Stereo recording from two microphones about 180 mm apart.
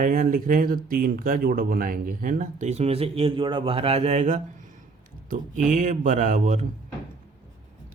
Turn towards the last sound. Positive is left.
turn(degrees=-45)  # may be behind; listen again after turning